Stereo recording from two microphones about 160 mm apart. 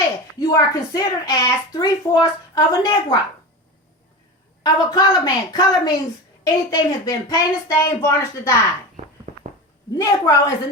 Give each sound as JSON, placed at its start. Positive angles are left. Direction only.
{"t": 0.3, "sound": "a woman's voice", "side_deg": 25}
{"t": 4.6, "sound": "a woman's voice", "side_deg": 25}
{"t": 9.3, "sound": "a sound", "side_deg": -45}
{"t": 10.0, "sound": "a woman's voice", "side_deg": 20}